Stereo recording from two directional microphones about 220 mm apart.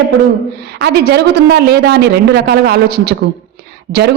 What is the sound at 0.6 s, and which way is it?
A woman's voice, 50° right (ahead or behind).